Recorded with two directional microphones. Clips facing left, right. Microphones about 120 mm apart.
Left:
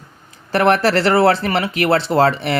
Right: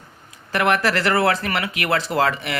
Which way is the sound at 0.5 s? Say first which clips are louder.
Left 5 dB; 35° left (ahead or behind).